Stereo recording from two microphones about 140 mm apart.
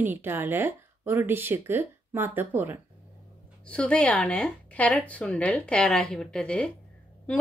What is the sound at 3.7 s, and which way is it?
Speech, 5° left (ahead or behind).